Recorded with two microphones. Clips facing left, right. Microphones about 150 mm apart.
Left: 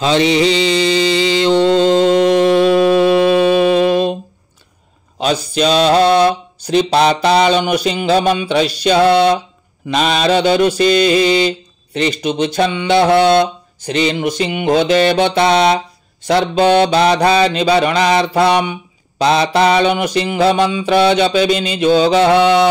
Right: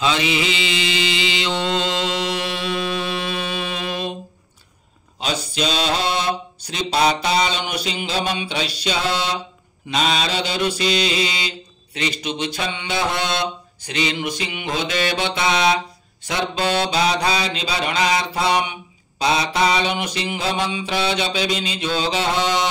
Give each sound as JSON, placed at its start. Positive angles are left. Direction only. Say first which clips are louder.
{"t": 0.0, "sound": "mantra", "louder": "left 8 dB", "side_deg": 35}
{"t": 3.1, "sound": "music", "louder": "left 15 dB", "side_deg": 50}
{"t": 5.2, "sound": "mantra", "louder": "left 8 dB", "side_deg": 55}
{"t": 13.9, "sound": "mantra", "louder": "left 7 dB", "side_deg": 45}
{"t": 14.4, "sound": "mantra", "louder": "left 11 dB", "side_deg": 55}